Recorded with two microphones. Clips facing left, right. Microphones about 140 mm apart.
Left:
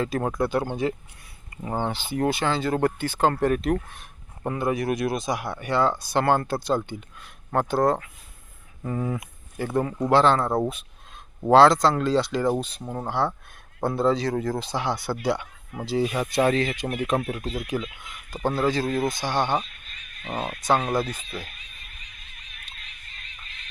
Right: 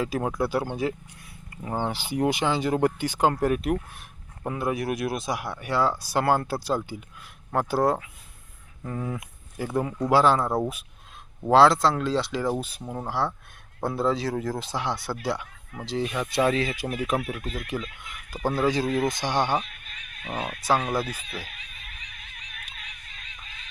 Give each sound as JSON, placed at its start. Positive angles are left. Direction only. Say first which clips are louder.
{"t": 0.0, "sound": "speech", "louder": "left 1 dB", "side_deg": -5}
{"t": 1.8, "sound": "speech", "louder": "even", "side_deg": -10}
{"t": 8.8, "sound": "speech", "louder": "left 4 dB", "side_deg": 5}
{"t": 18.4, "sound": "speech", "louder": "even", "side_deg": -10}
{"t": 20.2, "sound": "speech", "louder": "left 2 dB", "side_deg": 10}
{"t": 20.6, "sound": "speech", "louder": "left 2 dB", "side_deg": -5}
{"t": 21.6, "sound": "a sound", "louder": "right 3 dB", "side_deg": -75}